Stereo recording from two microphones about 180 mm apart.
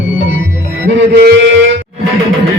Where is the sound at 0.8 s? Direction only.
75° right (ahead or behind).